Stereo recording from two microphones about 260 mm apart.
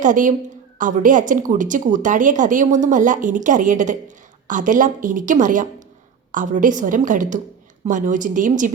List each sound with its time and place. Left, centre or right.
0.0 s a woman's voice: right